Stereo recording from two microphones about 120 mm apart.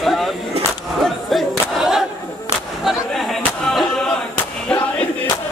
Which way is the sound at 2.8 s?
Centre (ahead or behind).